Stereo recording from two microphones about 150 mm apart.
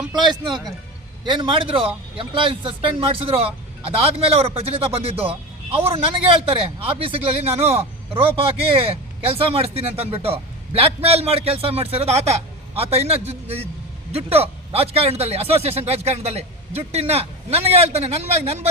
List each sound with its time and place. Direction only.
0.2 s a man's voice: 30° right (ahead or behind); by 18.7 s 45° right (ahead or behind)